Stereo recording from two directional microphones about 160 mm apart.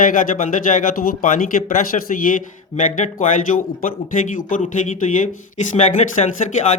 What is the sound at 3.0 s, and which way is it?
Speech, 55° left (ahead or behind).